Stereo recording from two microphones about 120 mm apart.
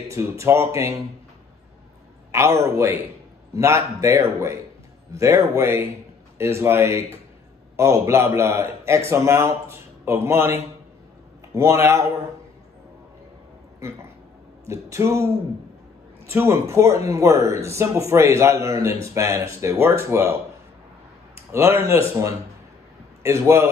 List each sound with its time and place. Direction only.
0.1 s a man's voice: 25° right (ahead or behind)
2.3 s a man's voice: 25° right (ahead or behind)
14.7 s a man's voice: 25° right (ahead or behind)
21.5 s a man's voice: 20° right (ahead or behind)